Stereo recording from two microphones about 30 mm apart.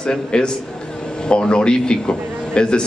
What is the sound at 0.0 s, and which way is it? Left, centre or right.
A man's voice, left.